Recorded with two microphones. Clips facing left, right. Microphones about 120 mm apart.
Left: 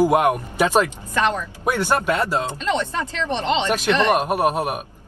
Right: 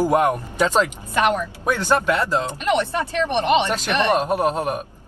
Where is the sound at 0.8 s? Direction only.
15° right (ahead or behind).